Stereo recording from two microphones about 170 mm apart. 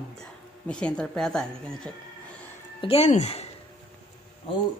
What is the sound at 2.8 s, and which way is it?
Speech, 35° left (ahead or behind).